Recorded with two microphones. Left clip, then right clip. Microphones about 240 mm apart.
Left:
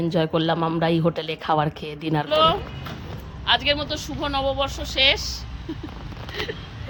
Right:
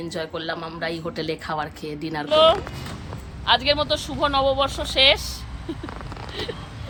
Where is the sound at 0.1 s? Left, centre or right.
Left.